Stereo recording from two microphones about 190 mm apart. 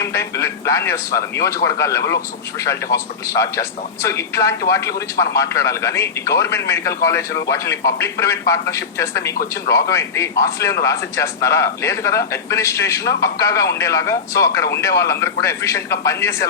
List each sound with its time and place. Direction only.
0.0 s a man's voice: 15° left (ahead or behind)